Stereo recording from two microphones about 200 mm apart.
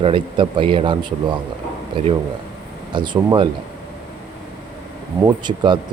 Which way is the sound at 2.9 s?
25° right (ahead or behind).